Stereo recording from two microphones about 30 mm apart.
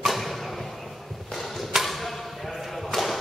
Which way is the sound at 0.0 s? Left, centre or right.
Centre.